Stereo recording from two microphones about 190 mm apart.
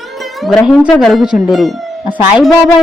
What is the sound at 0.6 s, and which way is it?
Speech, 5° right (ahead or behind).